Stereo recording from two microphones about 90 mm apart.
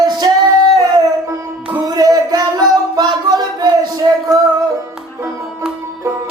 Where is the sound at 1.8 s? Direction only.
45° right (ahead or behind).